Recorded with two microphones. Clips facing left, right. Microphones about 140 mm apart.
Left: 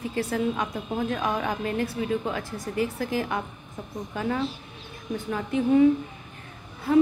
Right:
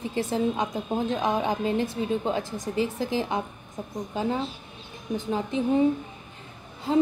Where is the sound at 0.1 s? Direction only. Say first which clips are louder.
Right 1 dB; 20° right (ahead or behind).